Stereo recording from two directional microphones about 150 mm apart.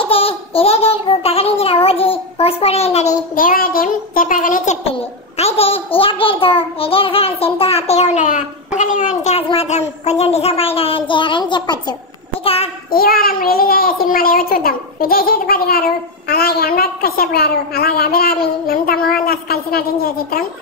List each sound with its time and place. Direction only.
0.0 s a child's voice: 40° left (ahead or behind)
3.3 s a child's voice: 70° left (ahead or behind)
5.4 s a child's voice: 40° left (ahead or behind)
12.9 s a child's voice: 75° left (ahead or behind)